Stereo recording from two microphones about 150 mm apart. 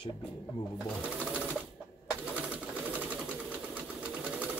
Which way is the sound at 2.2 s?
10° right (ahead or behind).